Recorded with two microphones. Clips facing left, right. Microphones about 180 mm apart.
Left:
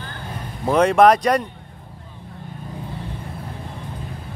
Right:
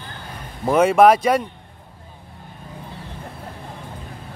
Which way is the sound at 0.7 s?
5° right (ahead or behind).